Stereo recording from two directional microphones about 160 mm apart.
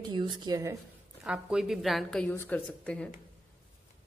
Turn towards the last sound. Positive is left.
turn(degrees=5)  # may be behind; listen again after turning